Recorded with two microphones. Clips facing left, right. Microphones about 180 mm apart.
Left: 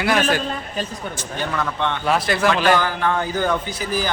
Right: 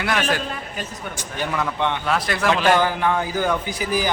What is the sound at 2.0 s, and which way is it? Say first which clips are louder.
Speech: left 5 dB; centre (ahead or behind).